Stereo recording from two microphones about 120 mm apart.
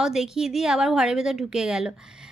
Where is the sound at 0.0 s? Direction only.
5° right (ahead or behind).